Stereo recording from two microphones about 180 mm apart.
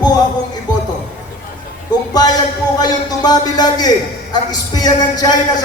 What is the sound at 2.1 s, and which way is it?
A man's voice, 20° left (ahead or behind).